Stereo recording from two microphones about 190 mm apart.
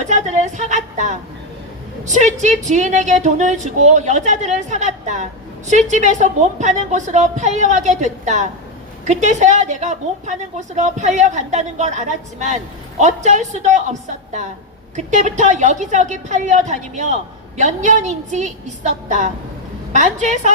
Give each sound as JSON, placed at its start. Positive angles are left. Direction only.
{"t": 0.0, "sound": "a sound", "side_deg": -40}
{"t": 2.0, "sound": "speech", "side_deg": -40}
{"t": 14.9, "sound": "speech", "side_deg": -40}